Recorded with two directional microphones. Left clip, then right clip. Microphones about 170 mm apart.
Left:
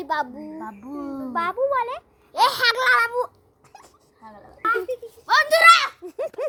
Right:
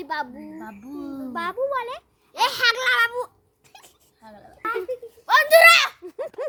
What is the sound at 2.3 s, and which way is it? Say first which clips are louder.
Speech: left 2 dB; 5° left (ahead or behind).